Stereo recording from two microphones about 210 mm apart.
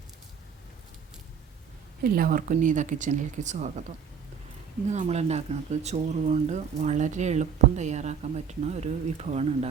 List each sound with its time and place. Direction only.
2.0 s speech: 45° right (ahead or behind)
4.9 s speech: 30° right (ahead or behind)